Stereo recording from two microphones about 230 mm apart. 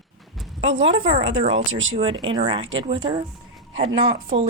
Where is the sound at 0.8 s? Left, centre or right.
Right.